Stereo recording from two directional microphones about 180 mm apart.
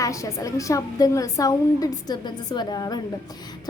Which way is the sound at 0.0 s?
15° left (ahead or behind).